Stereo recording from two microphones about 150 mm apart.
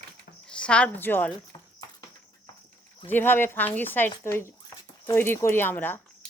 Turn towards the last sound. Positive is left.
turn(degrees=15)  # may be behind; listen again after turning